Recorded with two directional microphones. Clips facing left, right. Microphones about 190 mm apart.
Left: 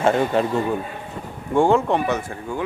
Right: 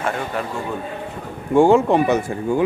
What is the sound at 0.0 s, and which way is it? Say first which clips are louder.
Speech: left 6 dB; 25° left (ahead or behind).